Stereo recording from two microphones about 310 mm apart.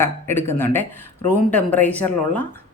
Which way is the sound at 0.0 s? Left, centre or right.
Centre.